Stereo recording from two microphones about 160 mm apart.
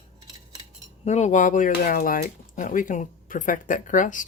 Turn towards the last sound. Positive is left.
turn(degrees=55)  # may be behind; listen again after turning